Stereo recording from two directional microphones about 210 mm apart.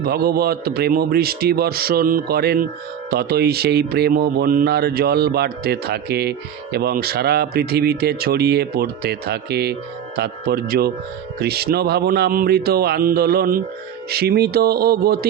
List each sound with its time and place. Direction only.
0.0 s speech: 45° right (ahead or behind)